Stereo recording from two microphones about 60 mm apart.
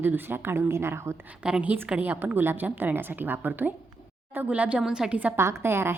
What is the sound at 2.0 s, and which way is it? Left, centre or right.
A woman's voice, right.